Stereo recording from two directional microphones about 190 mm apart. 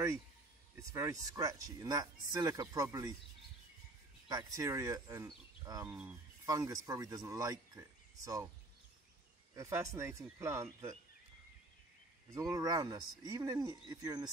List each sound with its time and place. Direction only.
0.7 s speech: 15° right (ahead or behind)
4.3 s speech: 15° right (ahead or behind)
9.6 s speech: 15° right (ahead or behind)
12.4 s speech: 15° right (ahead or behind)